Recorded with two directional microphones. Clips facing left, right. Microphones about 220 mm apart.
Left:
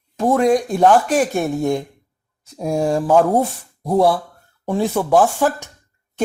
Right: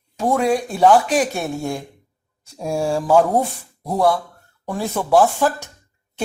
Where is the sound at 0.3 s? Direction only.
5° right (ahead or behind).